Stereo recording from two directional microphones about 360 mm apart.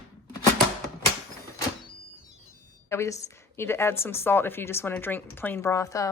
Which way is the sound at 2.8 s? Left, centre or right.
Centre.